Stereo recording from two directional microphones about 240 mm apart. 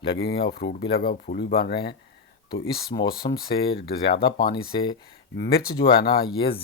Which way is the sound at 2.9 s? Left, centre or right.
Left.